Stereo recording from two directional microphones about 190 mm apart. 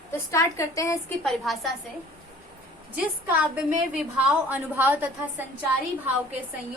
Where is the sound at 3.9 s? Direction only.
5° right (ahead or behind).